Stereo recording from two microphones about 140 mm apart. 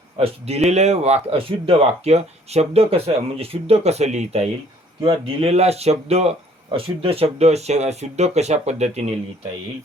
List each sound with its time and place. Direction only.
0.2 s speech: 50° right (ahead or behind)